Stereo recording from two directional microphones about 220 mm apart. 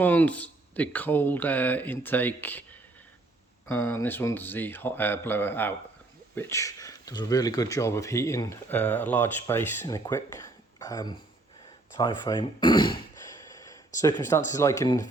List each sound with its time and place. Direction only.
0.0 s speech: 5° left (ahead or behind)
3.7 s speech: 10° left (ahead or behind)
13.5 s a sound: 15° left (ahead or behind)
14.5 s speech: 15° left (ahead or behind)